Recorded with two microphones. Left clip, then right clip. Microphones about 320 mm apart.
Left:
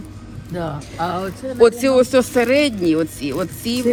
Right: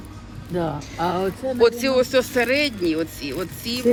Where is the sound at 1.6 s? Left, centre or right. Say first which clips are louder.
Left 5 dB; centre.